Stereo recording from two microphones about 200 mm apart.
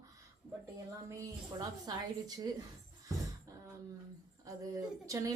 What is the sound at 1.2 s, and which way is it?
Speech, 20° right (ahead or behind).